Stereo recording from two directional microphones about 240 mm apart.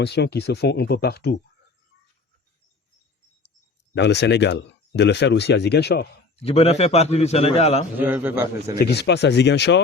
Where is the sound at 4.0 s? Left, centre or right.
Left.